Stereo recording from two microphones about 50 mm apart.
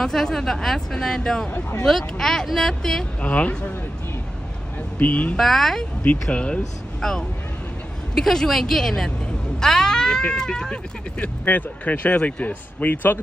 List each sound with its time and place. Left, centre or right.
0.0 s speech: centre
3.2 s speech: left
4.9 s speech: left
5.4 s speech: centre
6.3 s speech: left
7.0 s speech: centre
11.4 s speech: left